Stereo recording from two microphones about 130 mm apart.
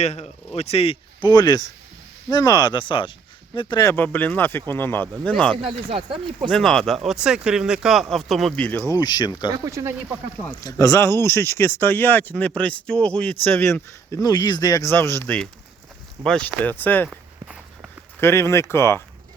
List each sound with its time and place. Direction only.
0.0 s speech: 55° left (ahead or behind)
1.2 s speech: 30° left (ahead or behind)
3.8 s speech: 15° left (ahead or behind)
5.6 s speech: 40° right (ahead or behind)
6.5 s speech: 5° left (ahead or behind)
8.9 s speech: 35° left (ahead or behind)
9.5 s speech: 25° right (ahead or behind)
10.6 s speech: 25° left (ahead or behind)
16.2 s speech: 10° left (ahead or behind)
17.1 s walk: 10° right (ahead or behind)
18.2 s speech: 20° left (ahead or behind)